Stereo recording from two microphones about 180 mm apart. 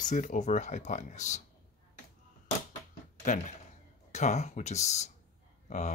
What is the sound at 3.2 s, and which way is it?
Speech, 45° left (ahead or behind).